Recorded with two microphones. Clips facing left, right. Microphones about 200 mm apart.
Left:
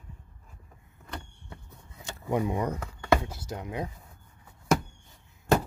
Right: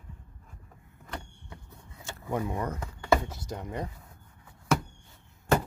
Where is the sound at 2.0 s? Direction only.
15° left (ahead or behind).